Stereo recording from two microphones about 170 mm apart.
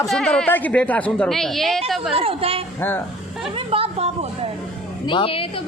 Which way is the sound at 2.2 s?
35° right (ahead or behind).